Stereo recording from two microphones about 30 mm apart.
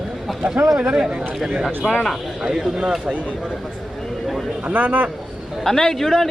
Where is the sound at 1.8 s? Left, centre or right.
Centre.